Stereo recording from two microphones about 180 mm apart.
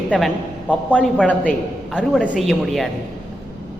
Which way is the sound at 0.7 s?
5° left (ahead or behind).